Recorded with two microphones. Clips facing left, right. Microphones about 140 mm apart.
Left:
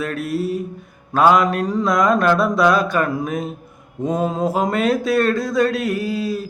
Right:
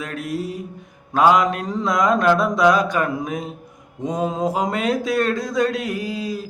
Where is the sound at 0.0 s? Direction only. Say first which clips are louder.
Left 4 dB; 20° right (ahead or behind).